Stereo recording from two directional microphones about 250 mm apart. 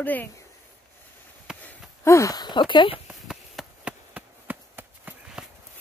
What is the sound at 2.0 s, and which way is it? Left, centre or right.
Speech, centre.